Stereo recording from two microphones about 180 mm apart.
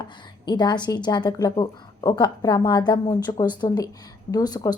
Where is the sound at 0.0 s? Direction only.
25° left (ahead or behind).